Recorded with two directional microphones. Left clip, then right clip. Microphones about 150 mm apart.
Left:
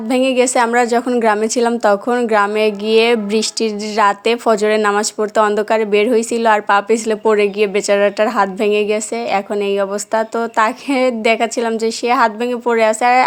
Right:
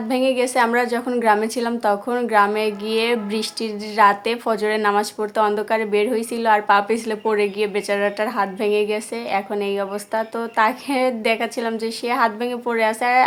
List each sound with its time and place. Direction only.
0.1 s a woman's voice: 45° left (ahead or behind)